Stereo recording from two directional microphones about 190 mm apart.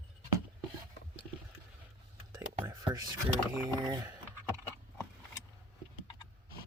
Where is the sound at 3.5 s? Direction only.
15° right (ahead or behind).